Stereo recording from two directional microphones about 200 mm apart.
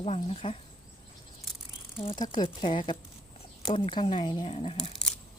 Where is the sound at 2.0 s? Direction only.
25° left (ahead or behind).